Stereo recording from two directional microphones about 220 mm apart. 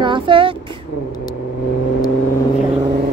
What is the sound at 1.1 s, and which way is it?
Vehicle, 15° left (ahead or behind).